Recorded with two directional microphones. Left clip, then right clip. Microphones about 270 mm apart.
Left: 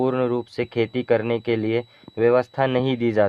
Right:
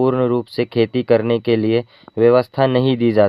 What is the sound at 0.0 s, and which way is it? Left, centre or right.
Speech, right.